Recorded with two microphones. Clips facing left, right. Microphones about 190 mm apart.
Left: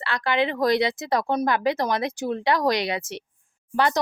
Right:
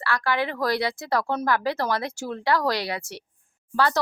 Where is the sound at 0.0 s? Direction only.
20° left (ahead or behind).